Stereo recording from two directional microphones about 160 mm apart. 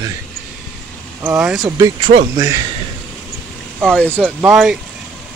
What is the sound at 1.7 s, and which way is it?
Speech, 20° right (ahead or behind).